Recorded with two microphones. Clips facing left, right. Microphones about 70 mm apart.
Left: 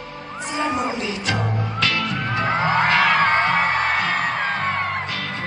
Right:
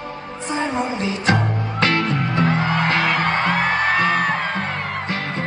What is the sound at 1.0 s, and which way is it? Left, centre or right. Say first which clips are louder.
Music: right 4 dB; right.